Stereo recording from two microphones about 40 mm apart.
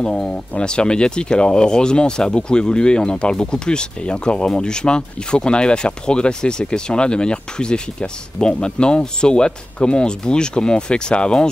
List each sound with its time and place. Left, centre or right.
0.0 s speech: left